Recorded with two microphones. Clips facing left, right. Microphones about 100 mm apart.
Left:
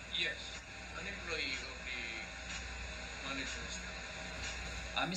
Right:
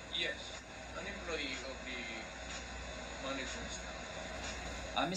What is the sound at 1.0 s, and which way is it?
Speech, 35° right (ahead or behind).